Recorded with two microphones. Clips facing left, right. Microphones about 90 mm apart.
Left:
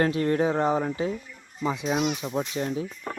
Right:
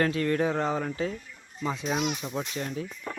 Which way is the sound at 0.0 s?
25° left (ahead or behind).